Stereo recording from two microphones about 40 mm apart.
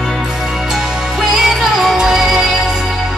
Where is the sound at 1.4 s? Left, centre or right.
Centre.